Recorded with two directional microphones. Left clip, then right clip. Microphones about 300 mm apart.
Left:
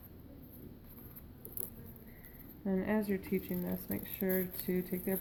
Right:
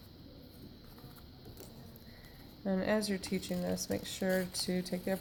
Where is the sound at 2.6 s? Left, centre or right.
Right.